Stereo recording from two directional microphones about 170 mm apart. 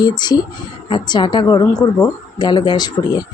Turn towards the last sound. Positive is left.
turn(degrees=25)  # may be behind; listen again after turning